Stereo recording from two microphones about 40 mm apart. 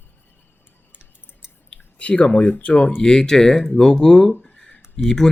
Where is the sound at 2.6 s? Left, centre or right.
Left.